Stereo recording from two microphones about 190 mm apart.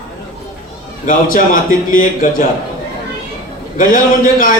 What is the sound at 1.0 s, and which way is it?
A man's voice, 45° left (ahead or behind).